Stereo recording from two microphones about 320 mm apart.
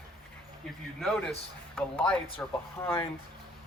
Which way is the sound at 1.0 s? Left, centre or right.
Centre.